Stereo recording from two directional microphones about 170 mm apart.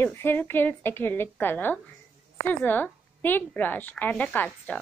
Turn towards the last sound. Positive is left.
turn(degrees=10)  # may be behind; listen again after turning